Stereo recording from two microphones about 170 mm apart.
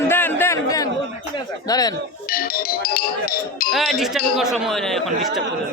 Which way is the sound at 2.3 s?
60° left (ahead or behind).